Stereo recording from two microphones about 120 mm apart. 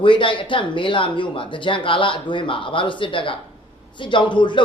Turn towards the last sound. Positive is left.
turn(degrees=40)  # may be behind; listen again after turning